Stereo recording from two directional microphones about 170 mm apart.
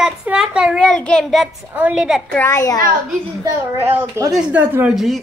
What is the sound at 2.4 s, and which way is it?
Speech, 20° left (ahead or behind).